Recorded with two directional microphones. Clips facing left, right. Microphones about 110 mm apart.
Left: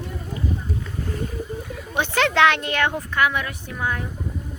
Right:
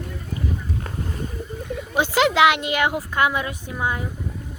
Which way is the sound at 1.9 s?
10° right (ahead or behind).